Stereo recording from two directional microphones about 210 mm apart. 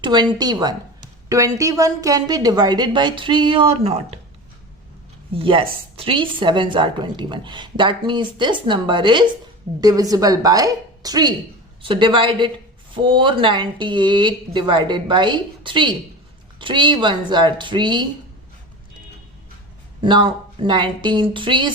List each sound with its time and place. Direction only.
0.0 s a woman's voice: 20° right (ahead or behind)
5.3 s a woman's voice: 25° right (ahead or behind)
20.0 s a woman's voice: 20° right (ahead or behind)